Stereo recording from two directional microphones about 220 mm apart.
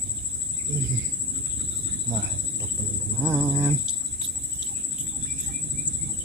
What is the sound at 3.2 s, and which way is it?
Speech, 10° right (ahead or behind).